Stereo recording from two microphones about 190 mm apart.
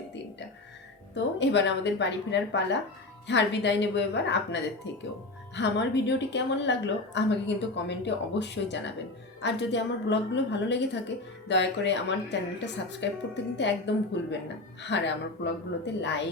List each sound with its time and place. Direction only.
1.1 s a woman's voice: 70° left (ahead or behind)